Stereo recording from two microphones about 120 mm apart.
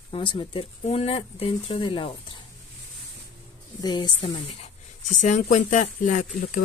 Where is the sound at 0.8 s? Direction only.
60° left (ahead or behind); by 2.4 s 45° left (ahead or behind).